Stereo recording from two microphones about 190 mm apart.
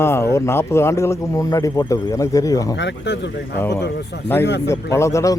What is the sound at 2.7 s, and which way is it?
Speech, 65° left (ahead or behind).